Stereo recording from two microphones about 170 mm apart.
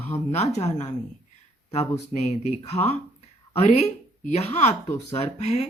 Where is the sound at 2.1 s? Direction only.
40° left (ahead or behind).